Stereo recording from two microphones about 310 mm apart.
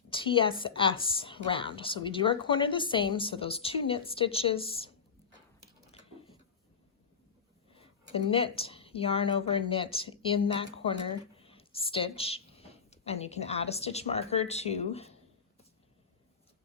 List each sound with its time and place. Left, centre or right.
0.1 s a woman's voice: centre
7.7 s speech: centre